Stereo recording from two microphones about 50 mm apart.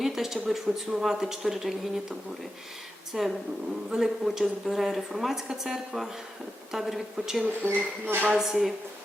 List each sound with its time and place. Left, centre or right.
0.0 s a woman's voice: centre
7.4 s speech: right
8.4 s a woman's voice: centre